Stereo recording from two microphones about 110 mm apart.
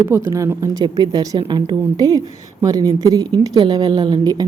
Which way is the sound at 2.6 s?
30° right (ahead or behind).